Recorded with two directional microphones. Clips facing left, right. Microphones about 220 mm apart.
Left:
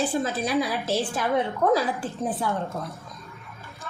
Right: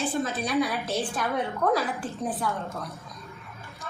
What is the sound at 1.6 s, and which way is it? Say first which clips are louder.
Speech: left 3 dB; 25° left (ahead or behind).